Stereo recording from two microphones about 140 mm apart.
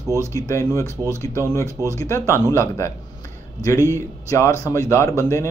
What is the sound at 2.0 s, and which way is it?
Speech, 20° left (ahead or behind).